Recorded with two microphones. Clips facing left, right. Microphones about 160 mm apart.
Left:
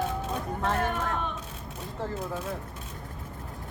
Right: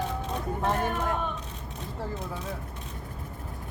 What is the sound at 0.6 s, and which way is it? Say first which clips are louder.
Snicker: right 1 dB; 15° right (ahead or behind).